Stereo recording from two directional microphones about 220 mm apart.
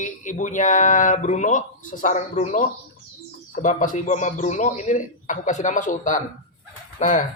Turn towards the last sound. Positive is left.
turn(degrees=35)  # may be behind; listen again after turning